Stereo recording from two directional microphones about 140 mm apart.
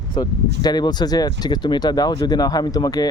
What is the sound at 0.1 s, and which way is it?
Speech, 30° left (ahead or behind).